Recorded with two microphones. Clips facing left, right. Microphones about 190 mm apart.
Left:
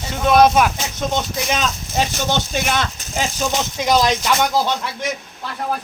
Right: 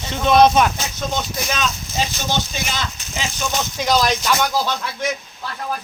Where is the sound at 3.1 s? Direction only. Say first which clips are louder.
Left 5 dB; 35° left (ahead or behind).